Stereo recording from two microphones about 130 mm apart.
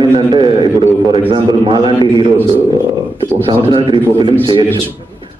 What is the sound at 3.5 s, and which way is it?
Speech, 40° right (ahead or behind).